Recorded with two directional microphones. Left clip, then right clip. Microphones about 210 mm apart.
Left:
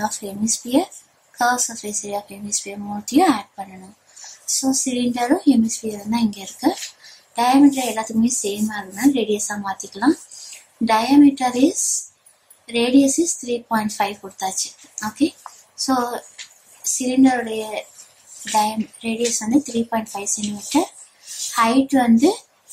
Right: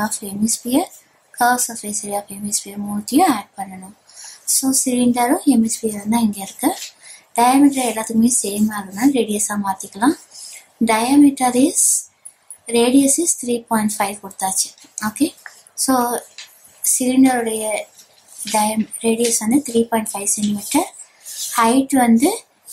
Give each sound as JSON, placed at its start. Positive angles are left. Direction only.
{"t": 0.0, "sound": "a woman's voice", "side_deg": 0}
{"t": 12.7, "sound": "a woman's voice", "side_deg": -10}